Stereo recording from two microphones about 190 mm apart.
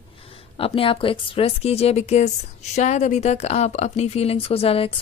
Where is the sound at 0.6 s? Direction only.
30° left (ahead or behind).